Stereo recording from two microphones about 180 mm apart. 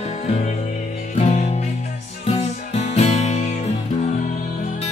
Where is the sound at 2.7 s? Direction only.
40° left (ahead or behind).